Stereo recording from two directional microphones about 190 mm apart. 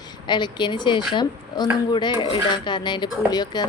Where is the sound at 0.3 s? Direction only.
25° left (ahead or behind).